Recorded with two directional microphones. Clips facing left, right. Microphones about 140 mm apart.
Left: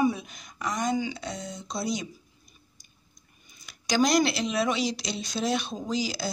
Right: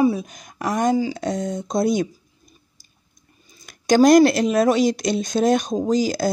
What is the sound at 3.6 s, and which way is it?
Speech, 50° right (ahead or behind).